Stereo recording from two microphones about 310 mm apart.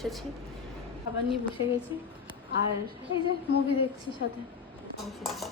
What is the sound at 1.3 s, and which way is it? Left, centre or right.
Speech, centre.